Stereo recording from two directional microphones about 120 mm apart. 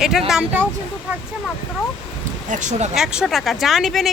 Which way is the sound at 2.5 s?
85° right.